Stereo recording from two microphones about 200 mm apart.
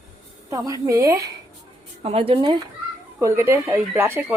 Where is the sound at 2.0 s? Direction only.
30° right (ahead or behind).